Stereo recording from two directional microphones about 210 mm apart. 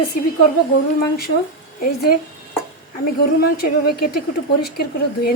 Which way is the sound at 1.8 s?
45° left (ahead or behind).